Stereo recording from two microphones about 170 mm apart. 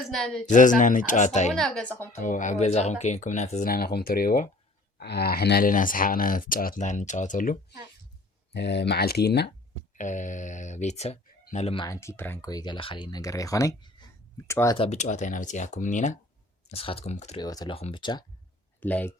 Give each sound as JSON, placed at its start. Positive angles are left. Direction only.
{"t": 0.1, "sound": "speech", "side_deg": 0}
{"t": 0.4, "sound": "speech", "side_deg": 50}
{"t": 1.5, "sound": "speech", "side_deg": 5}
{"t": 2.2, "sound": "speech", "side_deg": 50}
{"t": 3.7, "sound": "speech", "side_deg": 65}
{"t": 4.9, "sound": "speech", "side_deg": 70}
{"t": 8.5, "sound": "speech", "side_deg": 85}
{"t": 10.0, "sound": "speech", "side_deg": 45}
{"t": 11.9, "sound": "speech", "side_deg": 15}
{"t": 14.8, "sound": "speech", "side_deg": 40}
{"t": 16.6, "sound": "speech", "side_deg": 35}
{"t": 17.4, "sound": "speech", "side_deg": 25}
{"t": 18.8, "sound": "speech", "side_deg": 10}